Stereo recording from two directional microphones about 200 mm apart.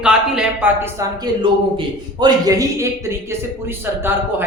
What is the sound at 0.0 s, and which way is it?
A man's voice, 5° right (ahead or behind).